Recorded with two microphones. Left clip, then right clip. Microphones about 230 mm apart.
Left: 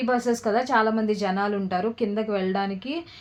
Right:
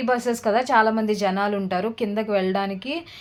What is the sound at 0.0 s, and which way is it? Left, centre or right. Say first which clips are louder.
A woman's voice: right 2 dB; right.